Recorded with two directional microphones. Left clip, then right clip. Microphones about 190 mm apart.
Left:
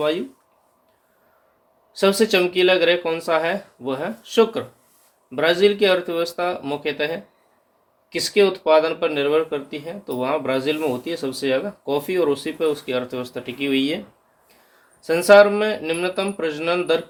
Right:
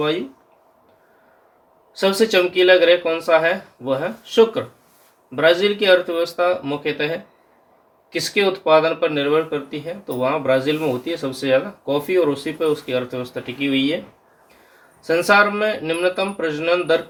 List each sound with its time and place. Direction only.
1.9 s speech: 45° left (ahead or behind)
15.0 s speech: 45° left (ahead or behind)